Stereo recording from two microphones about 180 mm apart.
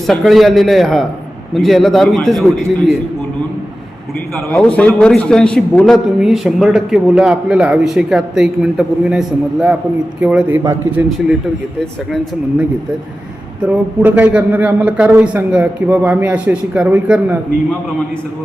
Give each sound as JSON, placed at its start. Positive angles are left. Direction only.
{"t": 0.1, "sound": "a man's voice", "side_deg": 0}
{"t": 4.5, "sound": "a man's voice", "side_deg": 5}
{"t": 13.6, "sound": "a man's voice", "side_deg": -10}